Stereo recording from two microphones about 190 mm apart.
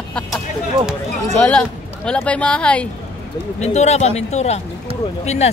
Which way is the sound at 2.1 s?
5° left (ahead or behind).